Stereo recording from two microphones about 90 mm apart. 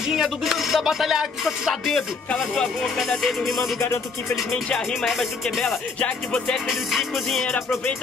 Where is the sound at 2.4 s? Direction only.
5° left (ahead or behind).